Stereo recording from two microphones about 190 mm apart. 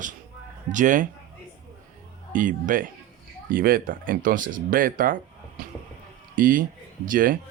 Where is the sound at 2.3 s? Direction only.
45° right (ahead or behind).